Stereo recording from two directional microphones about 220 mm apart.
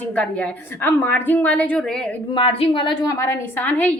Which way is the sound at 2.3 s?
25° left (ahead or behind).